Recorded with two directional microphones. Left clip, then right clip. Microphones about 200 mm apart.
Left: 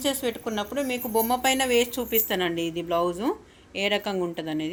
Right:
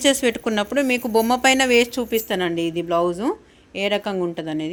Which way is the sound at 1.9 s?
25° right (ahead or behind).